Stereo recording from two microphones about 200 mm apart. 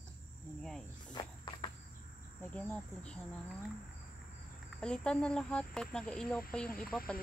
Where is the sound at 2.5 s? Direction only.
5° left (ahead or behind).